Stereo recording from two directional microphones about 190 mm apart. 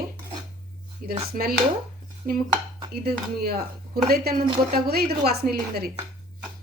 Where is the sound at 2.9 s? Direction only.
55° right (ahead or behind).